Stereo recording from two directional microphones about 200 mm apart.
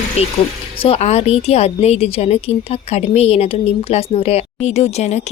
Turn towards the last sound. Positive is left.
turn(degrees=35)  # may be behind; listen again after turning